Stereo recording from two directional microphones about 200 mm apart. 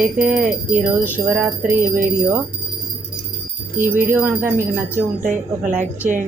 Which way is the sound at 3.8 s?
10° right (ahead or behind).